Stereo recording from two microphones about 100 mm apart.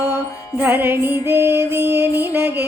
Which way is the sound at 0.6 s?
20° right (ahead or behind).